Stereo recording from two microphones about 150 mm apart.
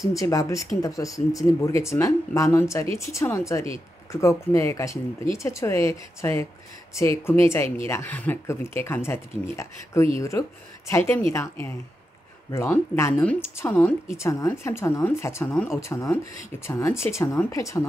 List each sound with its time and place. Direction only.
0.1 s speech: 20° left (ahead or behind)